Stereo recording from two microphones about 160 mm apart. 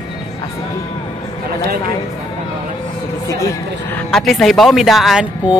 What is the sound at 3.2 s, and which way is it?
Speech, 20° left (ahead or behind).